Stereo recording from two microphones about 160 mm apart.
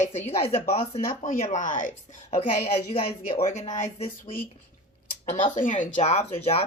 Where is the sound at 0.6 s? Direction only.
55° left (ahead or behind).